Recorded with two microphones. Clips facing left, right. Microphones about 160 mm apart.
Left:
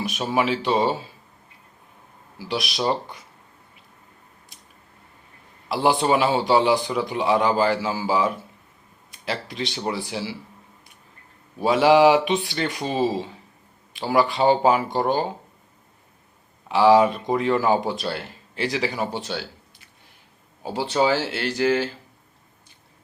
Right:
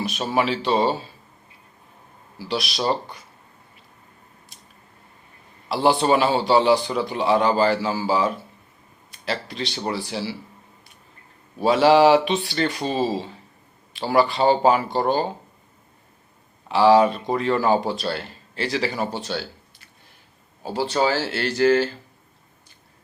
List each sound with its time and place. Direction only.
0.0 s speech: 15° left (ahead or behind)
2.4 s speech: 15° left (ahead or behind)
5.6 s speech: 15° left (ahead or behind)
11.6 s speech: 15° left (ahead or behind)
16.6 s speech: 15° left (ahead or behind)
20.7 s speech: 15° left (ahead or behind)